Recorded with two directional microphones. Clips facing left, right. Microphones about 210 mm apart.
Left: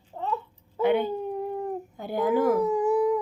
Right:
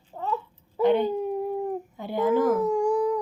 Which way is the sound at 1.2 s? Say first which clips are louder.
Right 3 dB; 5° right (ahead or behind).